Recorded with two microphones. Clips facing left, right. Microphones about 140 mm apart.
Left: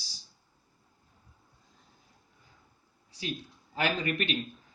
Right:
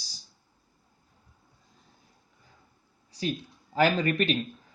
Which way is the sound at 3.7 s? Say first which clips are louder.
Right 6 dB; 40° right (ahead or behind).